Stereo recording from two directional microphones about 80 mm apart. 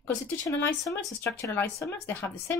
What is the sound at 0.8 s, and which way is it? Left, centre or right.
Speech, left.